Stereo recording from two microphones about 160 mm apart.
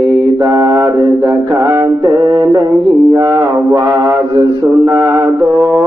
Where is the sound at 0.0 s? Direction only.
20° right (ahead or behind).